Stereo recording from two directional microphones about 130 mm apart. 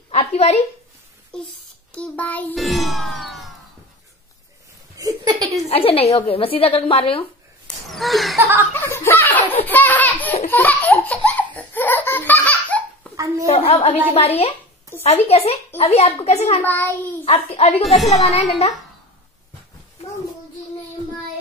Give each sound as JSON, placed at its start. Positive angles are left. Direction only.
{"t": 0.1, "sound": "a sound", "side_deg": 55}
{"t": 1.3, "sound": "child singing", "side_deg": 5}
{"t": 2.5, "sound": "music", "side_deg": 0}
{"t": 4.9, "sound": "speech", "side_deg": -30}
{"t": 5.7, "sound": "a woman's voice", "side_deg": 50}
{"t": 7.6, "sound": "a sound", "side_deg": 0}
{"t": 8.7, "sound": "laughter", "side_deg": 15}
{"t": 13.1, "sound": "a child's voice", "side_deg": -25}
{"t": 13.5, "sound": "a woman's voice", "side_deg": 50}
{"t": 16.6, "sound": "child singing", "side_deg": 15}
{"t": 17.2, "sound": "a woman's voice", "side_deg": 50}